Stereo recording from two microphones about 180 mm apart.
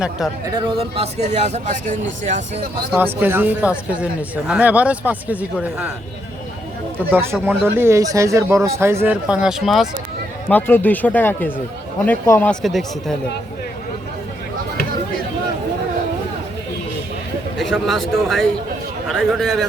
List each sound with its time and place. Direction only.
0.6 s speech: 35° right (ahead or behind)
3.0 s speech: 10° right (ahead or behind)
7.1 s speech: 15° right (ahead or behind)
7.3 s speech: centre (ahead or behind)
7.8 s speech: 15° right (ahead or behind)
10.5 s speech: 10° left (ahead or behind)
12.6 s speech: centre (ahead or behind)
17.6 s speech: centre (ahead or behind)